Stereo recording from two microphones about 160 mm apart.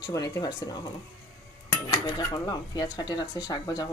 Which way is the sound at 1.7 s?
25° left (ahead or behind).